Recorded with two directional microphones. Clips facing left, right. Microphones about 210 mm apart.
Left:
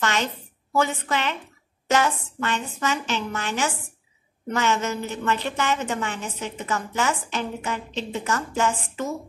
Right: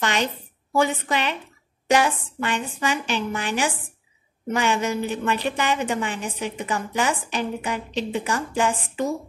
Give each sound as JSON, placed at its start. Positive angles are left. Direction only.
{"t": 0.0, "sound": "a woman's voice", "side_deg": -15}